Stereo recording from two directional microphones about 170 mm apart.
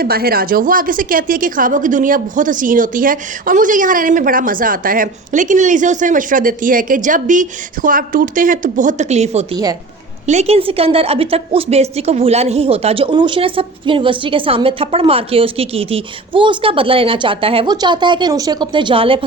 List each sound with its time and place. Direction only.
0.0 s a woman's voice: 60° right (ahead or behind); by 19.2 s 30° right (ahead or behind)